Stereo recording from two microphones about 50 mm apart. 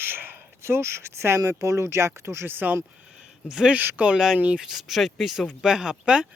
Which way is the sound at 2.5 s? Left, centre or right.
Right.